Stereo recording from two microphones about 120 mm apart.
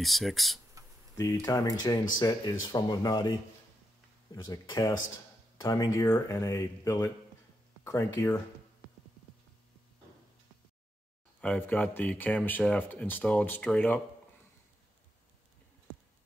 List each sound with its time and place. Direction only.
0.0 s speech: centre (ahead or behind)
0.8 s a sound: 30° right (ahead or behind)
1.1 s speech: 30° left (ahead or behind)
4.5 s speech: 40° left (ahead or behind)
11.4 s speech: 15° left (ahead or behind)